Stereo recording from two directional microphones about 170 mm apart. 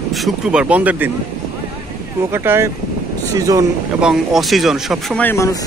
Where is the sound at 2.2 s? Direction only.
15° right (ahead or behind).